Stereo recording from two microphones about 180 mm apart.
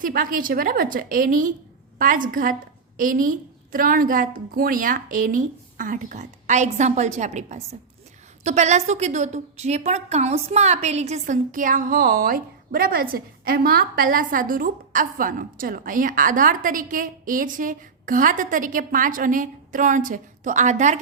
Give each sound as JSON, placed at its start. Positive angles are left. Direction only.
{"t": 0.0, "sound": "a woman's voice", "side_deg": -50}